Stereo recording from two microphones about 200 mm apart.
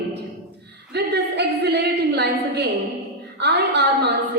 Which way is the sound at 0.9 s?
55° right (ahead or behind).